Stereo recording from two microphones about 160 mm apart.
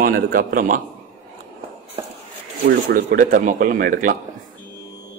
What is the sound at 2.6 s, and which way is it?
A man's voice, 75° right (ahead or behind).